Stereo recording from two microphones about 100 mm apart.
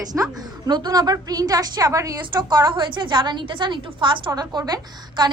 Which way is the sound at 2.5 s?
50° right (ahead or behind).